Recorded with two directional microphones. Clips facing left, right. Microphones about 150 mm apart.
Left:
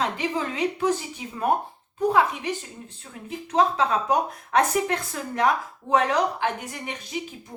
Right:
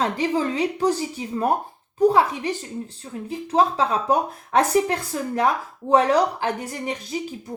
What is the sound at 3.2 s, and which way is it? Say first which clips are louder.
Speech: right 2 dB; 30° right (ahead or behind).